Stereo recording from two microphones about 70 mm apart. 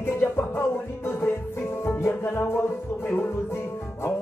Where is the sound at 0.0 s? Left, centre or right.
Left.